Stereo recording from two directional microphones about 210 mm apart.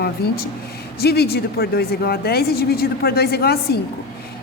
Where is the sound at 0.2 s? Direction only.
50° left (ahead or behind).